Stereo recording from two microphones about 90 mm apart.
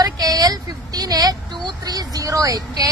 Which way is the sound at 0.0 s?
45° right (ahead or behind).